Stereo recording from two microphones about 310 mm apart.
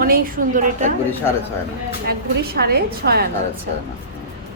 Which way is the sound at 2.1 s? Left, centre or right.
Right.